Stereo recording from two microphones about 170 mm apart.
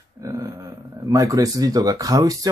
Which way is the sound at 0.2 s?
20° right (ahead or behind).